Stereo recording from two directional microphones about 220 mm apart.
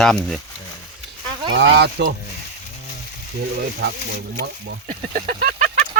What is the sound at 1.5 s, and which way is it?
Speech, 50° right (ahead or behind).